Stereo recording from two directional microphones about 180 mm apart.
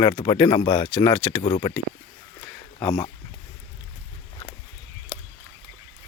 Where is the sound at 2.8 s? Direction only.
15° left (ahead or behind).